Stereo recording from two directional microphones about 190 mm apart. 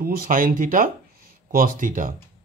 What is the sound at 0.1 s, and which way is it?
Speech, 50° right (ahead or behind).